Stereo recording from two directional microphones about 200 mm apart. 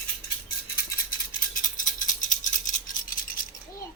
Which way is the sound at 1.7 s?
40° left (ahead or behind).